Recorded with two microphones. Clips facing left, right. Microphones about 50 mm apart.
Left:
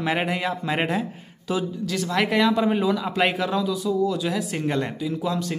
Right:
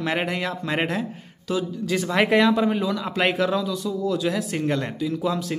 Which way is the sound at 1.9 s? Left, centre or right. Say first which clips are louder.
Right 4 dB; centre.